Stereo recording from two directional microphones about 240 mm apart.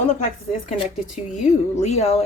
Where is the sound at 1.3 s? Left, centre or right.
Left.